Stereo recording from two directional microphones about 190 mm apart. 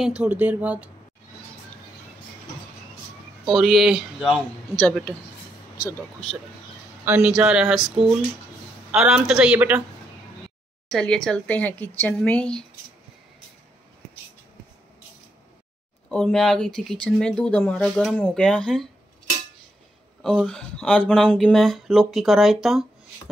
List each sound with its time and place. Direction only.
0.2 s speech: 10° right (ahead or behind)
3.4 s speech: centre (ahead or behind)
5.8 s speech: 50° left (ahead or behind)
7.1 s speech: 5° right (ahead or behind)
8.9 s speech: 5° right (ahead or behind)
10.9 s speech: 5° left (ahead or behind)
16.1 s speech: 5° left (ahead or behind)
20.2 s speech: centre (ahead or behind)